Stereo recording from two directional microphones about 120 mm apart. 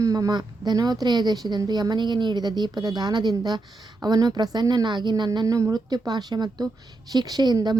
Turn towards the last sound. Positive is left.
turn(degrees=-35)  # may be behind; listen again after turning